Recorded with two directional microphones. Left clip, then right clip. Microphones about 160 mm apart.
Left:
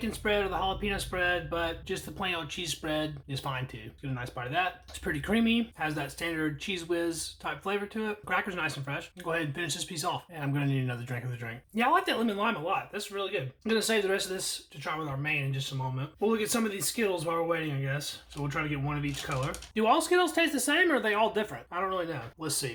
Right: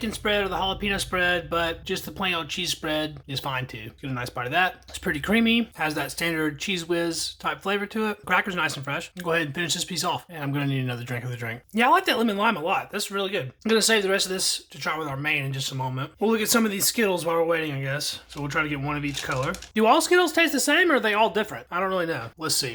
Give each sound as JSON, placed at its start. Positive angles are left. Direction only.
{"t": 0.0, "sound": "speech", "side_deg": -30}
{"t": 11.4, "sound": "speech", "side_deg": -40}